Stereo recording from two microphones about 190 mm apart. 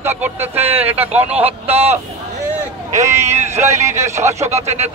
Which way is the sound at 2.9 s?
35° right (ahead or behind).